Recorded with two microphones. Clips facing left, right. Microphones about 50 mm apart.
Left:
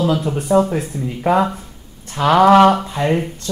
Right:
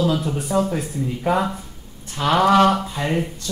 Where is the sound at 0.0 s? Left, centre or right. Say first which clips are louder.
Left 3 dB; left.